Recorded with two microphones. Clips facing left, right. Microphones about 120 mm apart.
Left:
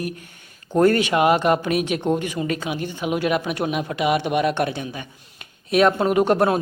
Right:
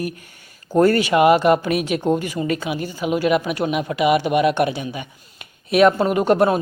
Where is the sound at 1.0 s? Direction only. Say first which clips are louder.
Right 3 dB; 5° right (ahead or behind).